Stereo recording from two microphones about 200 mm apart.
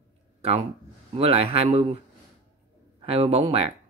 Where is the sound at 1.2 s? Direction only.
30° right (ahead or behind).